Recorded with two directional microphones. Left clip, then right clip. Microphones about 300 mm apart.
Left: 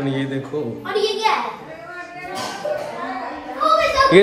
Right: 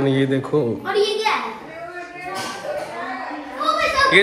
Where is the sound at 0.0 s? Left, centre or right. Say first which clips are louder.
Right 5 dB; centre.